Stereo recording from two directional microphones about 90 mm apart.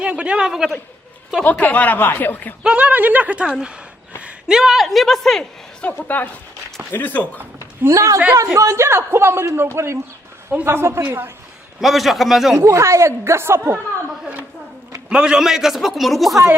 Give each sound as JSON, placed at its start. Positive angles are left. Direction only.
{"t": 0.0, "sound": "speech", "side_deg": -10}
{"t": 1.5, "sound": "speech", "side_deg": 15}
{"t": 2.6, "sound": "a man's voice", "side_deg": -15}
{"t": 6.0, "sound": "speech", "side_deg": 20}
{"t": 7.8, "sound": "a woman's voice", "side_deg": -30}
{"t": 11.8, "sound": "a man's voice", "side_deg": 0}
{"t": 12.5, "sound": "a woman's voice", "side_deg": -35}
{"t": 15.1, "sound": "a man's voice", "side_deg": -10}